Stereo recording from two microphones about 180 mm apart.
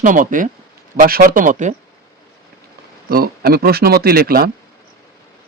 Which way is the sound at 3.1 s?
60° right (ahead or behind).